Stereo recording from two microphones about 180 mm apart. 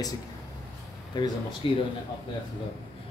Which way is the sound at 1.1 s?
25° left (ahead or behind).